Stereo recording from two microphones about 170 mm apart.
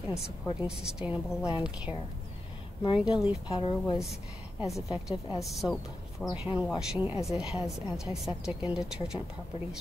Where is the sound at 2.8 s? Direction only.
30° left (ahead or behind).